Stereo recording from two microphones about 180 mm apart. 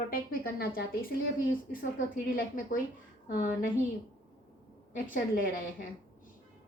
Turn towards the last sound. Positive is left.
turn(degrees=50)  # may be behind; listen again after turning